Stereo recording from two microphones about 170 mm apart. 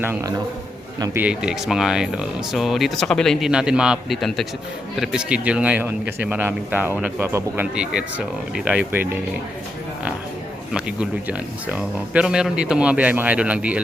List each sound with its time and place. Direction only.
0.0 s a man's voice: 15° right (ahead or behind)
1.2 s speech: 5° right (ahead or behind)
10.8 s speech: 5° right (ahead or behind)